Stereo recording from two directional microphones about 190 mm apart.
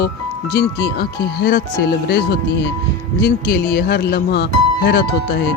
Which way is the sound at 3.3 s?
55° left (ahead or behind).